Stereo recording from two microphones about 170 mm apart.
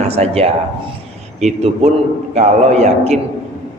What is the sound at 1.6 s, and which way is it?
A man's voice, 40° right (ahead or behind).